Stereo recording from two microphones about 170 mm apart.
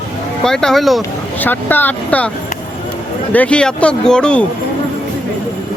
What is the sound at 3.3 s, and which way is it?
Speech, 5° left (ahead or behind).